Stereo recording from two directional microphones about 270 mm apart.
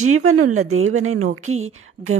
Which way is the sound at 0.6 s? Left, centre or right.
Right.